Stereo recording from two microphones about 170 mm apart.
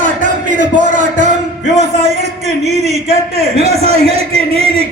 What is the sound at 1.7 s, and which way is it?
Music, 40° right (ahead or behind).